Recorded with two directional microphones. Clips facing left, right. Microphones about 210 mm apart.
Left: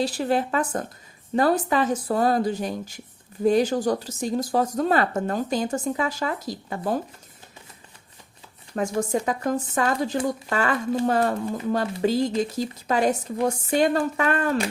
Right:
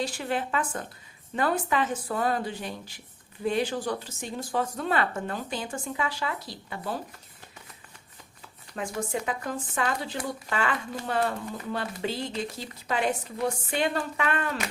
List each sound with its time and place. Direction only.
0.0 s speech: 35° left (ahead or behind)
9.0 s a woman's voice: 40° left (ahead or behind)